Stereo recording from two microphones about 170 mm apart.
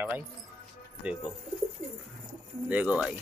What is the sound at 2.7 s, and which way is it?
Speech, 5° right (ahead or behind).